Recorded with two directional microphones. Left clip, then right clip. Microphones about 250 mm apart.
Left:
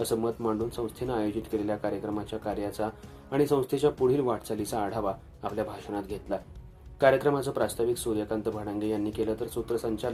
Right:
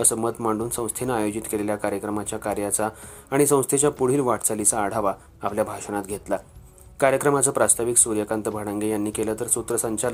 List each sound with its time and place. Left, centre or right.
0.0 s speech: right